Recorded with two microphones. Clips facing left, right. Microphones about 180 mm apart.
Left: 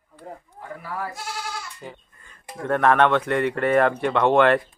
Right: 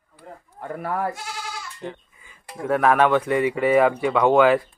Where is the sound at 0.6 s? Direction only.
60° right (ahead or behind).